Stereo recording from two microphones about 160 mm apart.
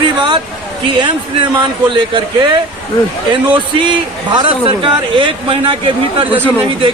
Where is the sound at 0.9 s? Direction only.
30° right (ahead or behind).